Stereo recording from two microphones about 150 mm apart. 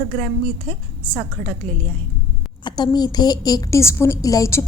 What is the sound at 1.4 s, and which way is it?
Speech, 60° right (ahead or behind).